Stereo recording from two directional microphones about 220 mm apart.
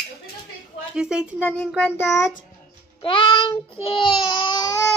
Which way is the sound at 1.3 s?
10° left (ahead or behind).